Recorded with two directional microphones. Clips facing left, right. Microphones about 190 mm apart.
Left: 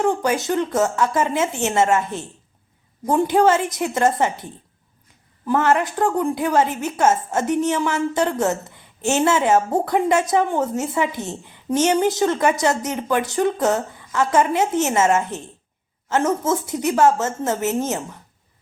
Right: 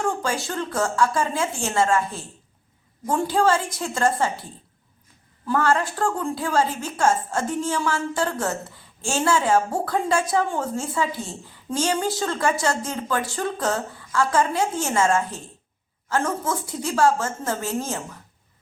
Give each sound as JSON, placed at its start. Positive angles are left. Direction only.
{"t": 0.0, "sound": "a woman's voice", "side_deg": 20}
{"t": 5.5, "sound": "a woman's voice", "side_deg": 20}